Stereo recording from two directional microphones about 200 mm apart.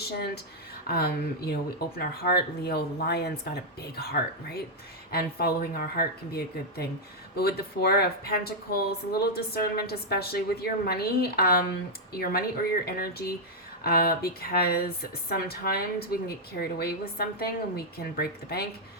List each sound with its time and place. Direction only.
0.9 s speech: 50° left (ahead or behind)